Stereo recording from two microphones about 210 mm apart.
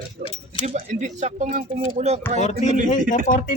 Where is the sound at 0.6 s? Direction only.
35° right (ahead or behind).